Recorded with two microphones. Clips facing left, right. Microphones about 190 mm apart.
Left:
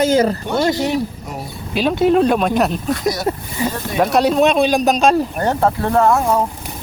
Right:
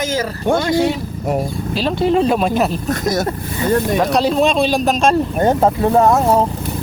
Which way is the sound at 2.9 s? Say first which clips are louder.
Right 1 dB; 50° right (ahead or behind).